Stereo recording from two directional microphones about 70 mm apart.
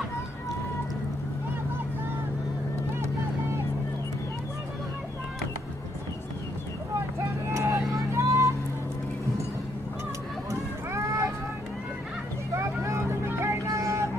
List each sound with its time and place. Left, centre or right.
7.2 s vehicle: right
10.5 s boat: right
12.5 s vehicle: right
13.7 s music: right